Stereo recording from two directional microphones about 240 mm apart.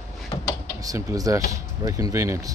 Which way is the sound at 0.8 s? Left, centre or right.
Centre.